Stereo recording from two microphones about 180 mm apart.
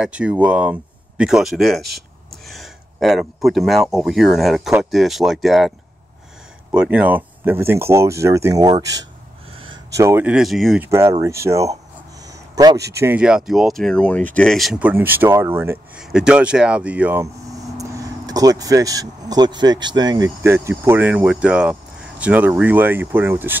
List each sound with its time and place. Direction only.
0.0 s speech: 5° right (ahead or behind)
6.7 s speech: 5° right (ahead or behind)
9.9 s speech: 15° right (ahead or behind)
10.9 s speech: 15° right (ahead or behind)
13.0 s speech: 5° right (ahead or behind)